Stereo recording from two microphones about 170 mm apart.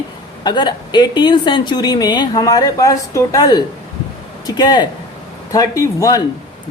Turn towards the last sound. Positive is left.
turn(degrees=20)  # may be behind; listen again after turning